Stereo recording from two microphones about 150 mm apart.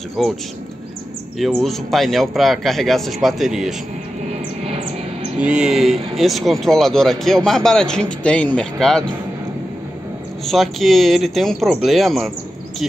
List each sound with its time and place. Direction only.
0.2 s speech: centre (ahead or behind)
1.4 s speech: centre (ahead or behind)
4.3 s a sound: 45° right (ahead or behind)
5.4 s speech: 5° right (ahead or behind)
10.4 s speech: centre (ahead or behind)